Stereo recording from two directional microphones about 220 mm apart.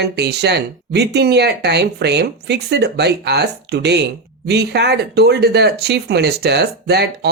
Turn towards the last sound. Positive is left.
turn(degrees=-50)  # may be behind; listen again after turning